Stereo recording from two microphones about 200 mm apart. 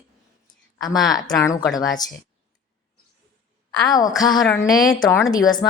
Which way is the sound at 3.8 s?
20° left (ahead or behind).